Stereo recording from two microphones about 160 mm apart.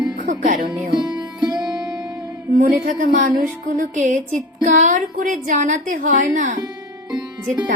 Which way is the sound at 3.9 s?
55° right (ahead or behind).